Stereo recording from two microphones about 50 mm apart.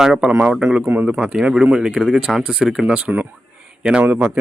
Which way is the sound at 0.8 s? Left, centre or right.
Right.